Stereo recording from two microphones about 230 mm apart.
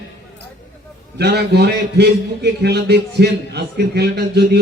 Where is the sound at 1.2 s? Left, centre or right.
Right.